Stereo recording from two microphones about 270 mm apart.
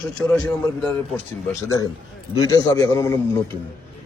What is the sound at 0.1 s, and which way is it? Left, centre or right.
A man's voice, centre.